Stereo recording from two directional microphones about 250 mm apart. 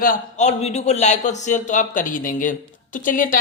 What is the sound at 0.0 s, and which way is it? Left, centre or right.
A man's voice, left.